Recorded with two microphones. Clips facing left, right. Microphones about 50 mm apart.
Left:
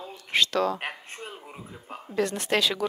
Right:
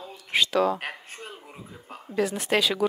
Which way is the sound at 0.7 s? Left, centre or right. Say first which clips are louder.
Even; centre.